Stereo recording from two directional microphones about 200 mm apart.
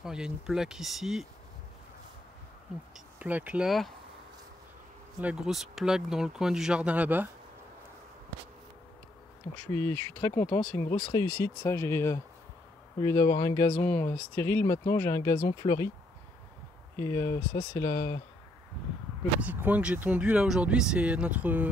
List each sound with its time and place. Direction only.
0.0 s speech: 5° right (ahead or behind)
3.2 s speech: 10° right (ahead or behind)
5.2 s speech: 5° right (ahead or behind)
9.7 s speech: 10° left (ahead or behind)
11.0 s speech: 25° left (ahead or behind)
13.7 s speech: 10° left (ahead or behind)
17.0 s speech: 15° left (ahead or behind)
19.4 s speech: 10° right (ahead or behind)